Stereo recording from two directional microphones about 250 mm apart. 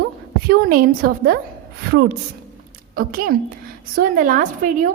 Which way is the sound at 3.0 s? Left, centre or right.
Right.